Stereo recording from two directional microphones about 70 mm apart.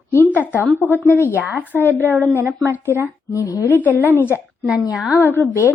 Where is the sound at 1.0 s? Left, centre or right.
Left.